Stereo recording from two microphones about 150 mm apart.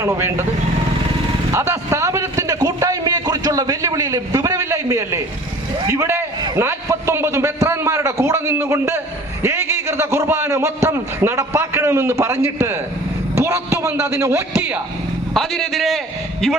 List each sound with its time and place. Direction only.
0.0 s a man's voice: 15° right (ahead or behind)
1.5 s a man's voice: 20° right (ahead or behind)
15.4 s a man's voice: centre (ahead or behind)